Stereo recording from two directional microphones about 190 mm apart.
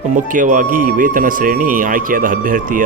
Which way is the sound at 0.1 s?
45° right (ahead or behind).